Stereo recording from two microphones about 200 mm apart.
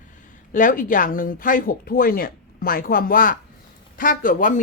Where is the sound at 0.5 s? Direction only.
40° left (ahead or behind).